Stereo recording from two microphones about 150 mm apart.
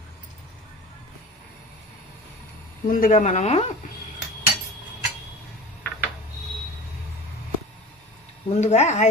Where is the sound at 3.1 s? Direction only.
50° left (ahead or behind).